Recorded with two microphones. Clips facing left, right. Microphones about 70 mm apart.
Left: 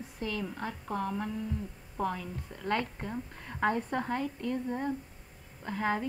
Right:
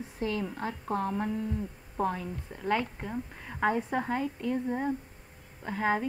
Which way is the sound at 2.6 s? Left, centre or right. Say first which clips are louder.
Right 2 dB; centre.